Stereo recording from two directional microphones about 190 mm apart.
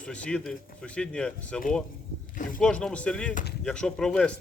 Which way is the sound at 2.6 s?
5° left (ahead or behind).